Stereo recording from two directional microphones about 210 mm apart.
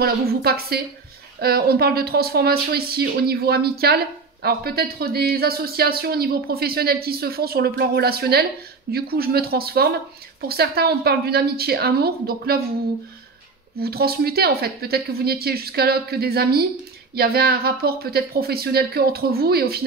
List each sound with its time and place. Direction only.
0.0 s speech: 45° right (ahead or behind)
13.7 s speech: 45° right (ahead or behind)